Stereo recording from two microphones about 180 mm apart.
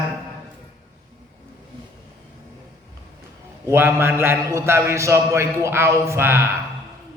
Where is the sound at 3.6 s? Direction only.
10° right (ahead or behind).